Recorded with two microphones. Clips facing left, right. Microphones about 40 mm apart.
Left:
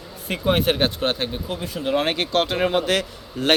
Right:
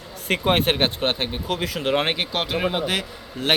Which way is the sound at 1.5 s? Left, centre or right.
Right.